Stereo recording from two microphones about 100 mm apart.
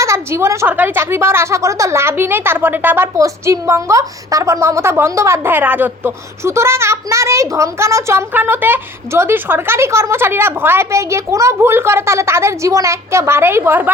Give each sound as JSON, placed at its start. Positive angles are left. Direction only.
{"t": 0.0, "sound": "a sound", "side_deg": -30}
{"t": 0.7, "sound": "a woman's voice", "side_deg": -20}
{"t": 3.2, "sound": "a woman's voice", "side_deg": -35}